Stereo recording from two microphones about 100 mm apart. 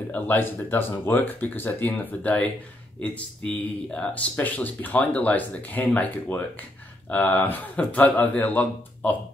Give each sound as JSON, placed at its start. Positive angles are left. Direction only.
{"t": 0.1, "sound": "speech", "side_deg": 20}